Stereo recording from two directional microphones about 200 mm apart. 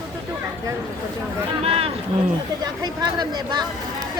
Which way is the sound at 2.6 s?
20° right (ahead or behind).